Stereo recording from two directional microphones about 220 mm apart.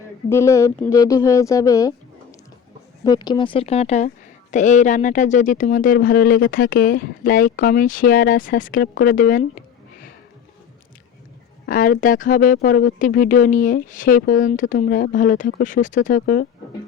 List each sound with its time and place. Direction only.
0.3 s speech: 15° left (ahead or behind)
3.0 s speech: 15° left (ahead or behind); by 10.1 s 40° left (ahead or behind)
11.6 s speech: 40° left (ahead or behind)